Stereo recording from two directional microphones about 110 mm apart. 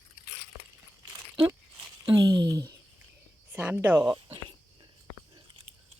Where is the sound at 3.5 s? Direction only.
15° right (ahead or behind).